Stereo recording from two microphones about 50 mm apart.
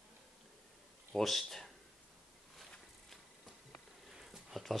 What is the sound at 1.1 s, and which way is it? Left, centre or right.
Speech, centre.